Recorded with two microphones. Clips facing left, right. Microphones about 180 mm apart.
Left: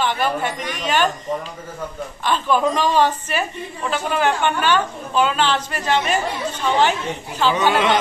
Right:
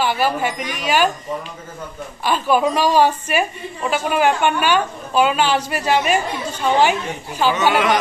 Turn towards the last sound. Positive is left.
turn(degrees=-10)  # may be behind; listen again after turning